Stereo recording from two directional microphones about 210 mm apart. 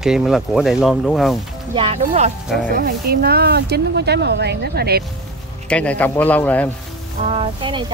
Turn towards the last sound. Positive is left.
turn(degrees=-25)  # may be behind; listen again after turning